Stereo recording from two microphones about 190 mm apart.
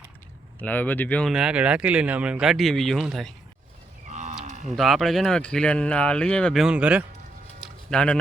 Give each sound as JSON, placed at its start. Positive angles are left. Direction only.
{"t": 0.6, "sound": "speech", "side_deg": 10}
{"t": 1.3, "sound": "speech", "side_deg": -5}
{"t": 4.1, "sound": "moo", "side_deg": -40}
{"t": 4.7, "sound": "speech", "side_deg": 0}
{"t": 7.6, "sound": "a sound", "side_deg": 5}